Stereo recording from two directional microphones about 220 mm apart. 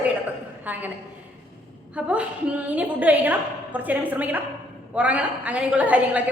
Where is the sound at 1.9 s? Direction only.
5° right (ahead or behind).